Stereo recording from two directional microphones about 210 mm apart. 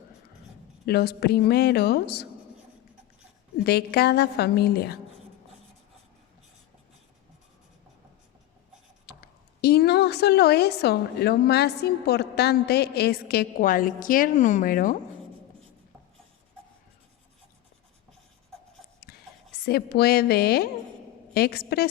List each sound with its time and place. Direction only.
0.9 s a woman's voice: 50° left (ahead or behind)
3.6 s a woman's voice: 50° left (ahead or behind)
9.0 s a woman's voice: 50° left (ahead or behind)
19.5 s a woman's voice: 50° left (ahead or behind)